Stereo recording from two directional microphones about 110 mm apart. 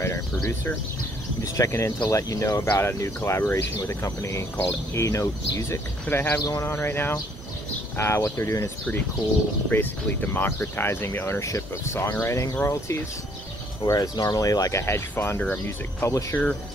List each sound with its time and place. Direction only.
0.0 s speech: 25° left (ahead or behind)
9.7 s speech: 15° left (ahead or behind)